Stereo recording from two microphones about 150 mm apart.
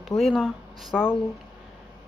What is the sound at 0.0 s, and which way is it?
Speech, centre (ahead or behind).